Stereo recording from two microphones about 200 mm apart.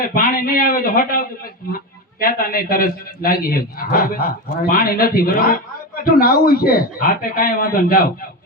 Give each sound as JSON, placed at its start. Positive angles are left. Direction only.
{"t": 0.1, "sound": "a man's voice", "side_deg": 45}